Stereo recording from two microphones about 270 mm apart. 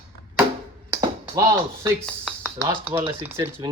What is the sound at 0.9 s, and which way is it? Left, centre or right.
Chop, centre.